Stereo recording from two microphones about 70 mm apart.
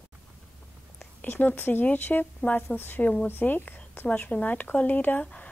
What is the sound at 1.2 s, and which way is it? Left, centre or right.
Speech, left.